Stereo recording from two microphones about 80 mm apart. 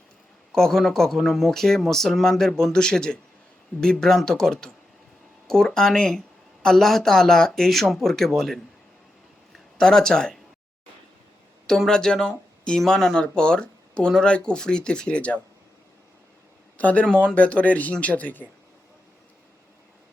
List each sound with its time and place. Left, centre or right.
0.5 s speech: centre
9.7 s speech: centre
11.6 s speech: centre
16.7 s a man's voice: centre